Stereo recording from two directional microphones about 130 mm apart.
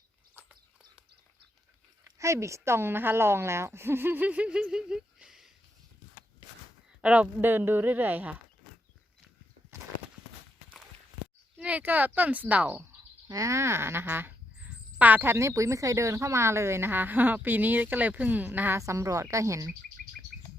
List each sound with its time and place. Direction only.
0.3 s a sound: 10° right (ahead or behind)
2.0 s speech: 25° right (ahead or behind); by 5.5 s 5° right (ahead or behind)
7.0 s speech: 10° right (ahead or behind)
11.5 s speech: 10° right (ahead or behind)
13.2 s speech: 25° right (ahead or behind)